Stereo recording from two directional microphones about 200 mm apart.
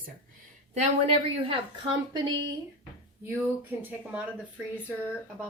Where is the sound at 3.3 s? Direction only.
10° right (ahead or behind).